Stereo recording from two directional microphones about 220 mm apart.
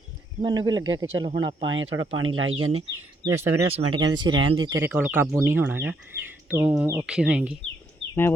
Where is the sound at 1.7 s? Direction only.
60° right (ahead or behind).